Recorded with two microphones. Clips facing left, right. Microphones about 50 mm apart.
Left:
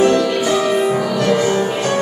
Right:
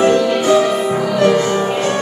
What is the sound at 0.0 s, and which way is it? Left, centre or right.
Music, centre.